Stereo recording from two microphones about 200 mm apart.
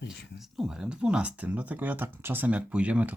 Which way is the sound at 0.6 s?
5° right (ahead or behind).